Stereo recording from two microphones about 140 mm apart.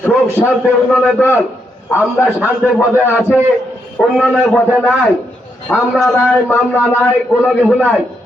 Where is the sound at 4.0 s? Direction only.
5° left (ahead or behind).